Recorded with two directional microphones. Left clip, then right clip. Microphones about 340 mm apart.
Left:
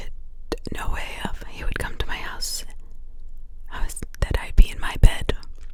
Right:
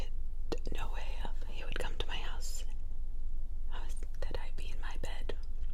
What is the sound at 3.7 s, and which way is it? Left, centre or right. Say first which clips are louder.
Whispering: left 15 dB; left.